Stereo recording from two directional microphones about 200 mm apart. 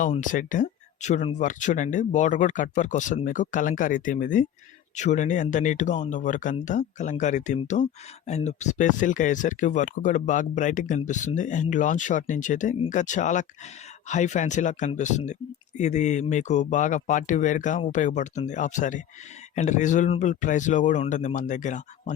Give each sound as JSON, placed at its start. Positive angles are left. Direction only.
{"t": 0.0, "sound": "speech", "side_deg": 40}